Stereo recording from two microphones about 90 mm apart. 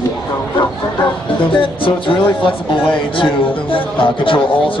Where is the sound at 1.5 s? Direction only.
70° left (ahead or behind).